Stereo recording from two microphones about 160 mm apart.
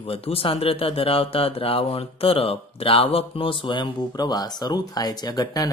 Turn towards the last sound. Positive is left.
turn(degrees=25)  # may be behind; listen again after turning